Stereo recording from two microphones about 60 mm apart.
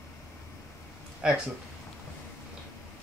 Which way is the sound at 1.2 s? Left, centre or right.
Centre.